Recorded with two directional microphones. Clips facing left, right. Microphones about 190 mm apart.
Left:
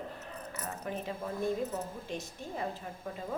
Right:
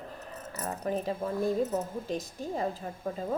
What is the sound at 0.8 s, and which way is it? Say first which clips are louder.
A woman's voice: right 7 dB; 35° right (ahead or behind).